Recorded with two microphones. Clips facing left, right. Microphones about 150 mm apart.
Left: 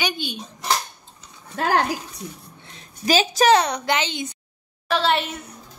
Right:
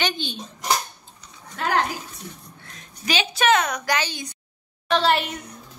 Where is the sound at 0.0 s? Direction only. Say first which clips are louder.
Even; 10° left (ahead or behind).